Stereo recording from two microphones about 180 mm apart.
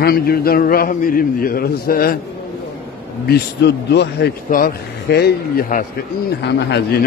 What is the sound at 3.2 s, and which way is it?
A man's voice, 65° left (ahead or behind).